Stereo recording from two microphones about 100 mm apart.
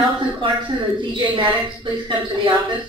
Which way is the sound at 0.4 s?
60° right (ahead or behind).